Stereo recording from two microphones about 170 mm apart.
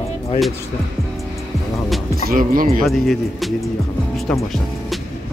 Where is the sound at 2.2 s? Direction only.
55° right (ahead or behind).